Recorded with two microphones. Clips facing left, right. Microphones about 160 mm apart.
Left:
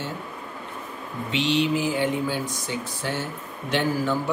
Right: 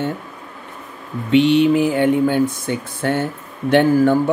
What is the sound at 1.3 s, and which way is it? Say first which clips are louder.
Mantra: right 10 dB; 55° right (ahead or behind).